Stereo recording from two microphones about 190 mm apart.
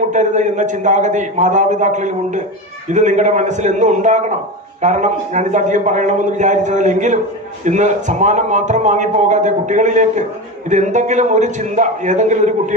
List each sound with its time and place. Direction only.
0.1 s a man's voice: 40° right (ahead or behind)